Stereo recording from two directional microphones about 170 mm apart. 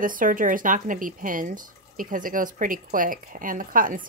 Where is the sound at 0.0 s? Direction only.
55° right (ahead or behind).